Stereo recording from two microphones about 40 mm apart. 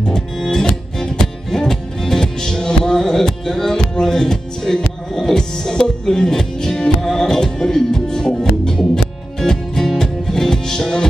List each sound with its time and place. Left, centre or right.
0.4 s music: centre